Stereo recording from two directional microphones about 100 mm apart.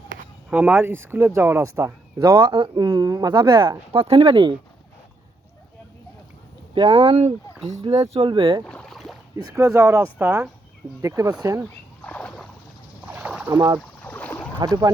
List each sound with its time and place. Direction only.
0.5 s speech: 20° right (ahead or behind)
2.1 s speech: 45° right (ahead or behind)
3.9 s speech: 65° right (ahead or behind)
6.7 s speech: 65° right (ahead or behind)
7.7 s speech: 90° right
8.1 s speech: 60° right (ahead or behind)
8.6 s boat: 10° left (ahead or behind)
9.4 s speech: 35° right (ahead or behind)
11.2 s speech: 35° right (ahead or behind)
12.0 s a sound: 15° left (ahead or behind)
13.1 s a sound: 10° right (ahead or behind)
13.5 s speech: 40° right (ahead or behind)
14.0 s boat: 20° left (ahead or behind)
14.6 s speech: 45° right (ahead or behind)